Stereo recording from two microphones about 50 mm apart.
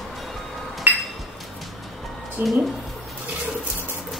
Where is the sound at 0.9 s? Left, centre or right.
Right.